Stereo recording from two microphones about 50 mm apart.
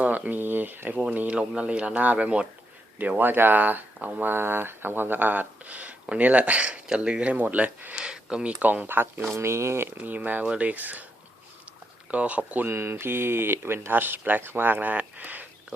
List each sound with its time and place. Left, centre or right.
0.3 s speech: right
1.1 s speech: right
3.0 s speech: right
7.9 s a sound: centre
8.6 s speech: right
8.9 s speech: right
9.3 s speech: right
10.0 s speech: right
12.1 s speech: right
12.6 s speech: right